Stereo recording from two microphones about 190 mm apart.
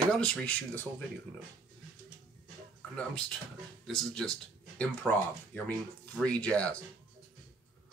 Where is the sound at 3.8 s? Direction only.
5° left (ahead or behind).